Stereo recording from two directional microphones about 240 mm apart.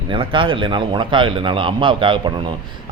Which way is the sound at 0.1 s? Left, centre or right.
Right.